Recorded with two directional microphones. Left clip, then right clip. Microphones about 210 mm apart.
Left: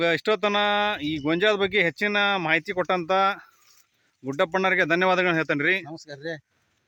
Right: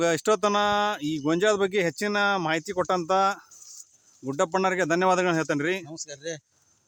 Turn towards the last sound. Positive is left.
turn(degrees=-10)  # may be behind; listen again after turning